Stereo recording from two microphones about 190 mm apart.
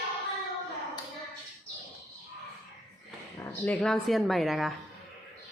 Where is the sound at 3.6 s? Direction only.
5° left (ahead or behind).